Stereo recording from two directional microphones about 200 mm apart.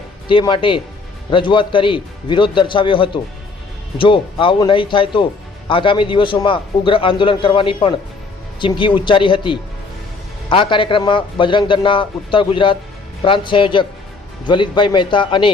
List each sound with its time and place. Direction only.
0.3 s speech: 25° left (ahead or behind)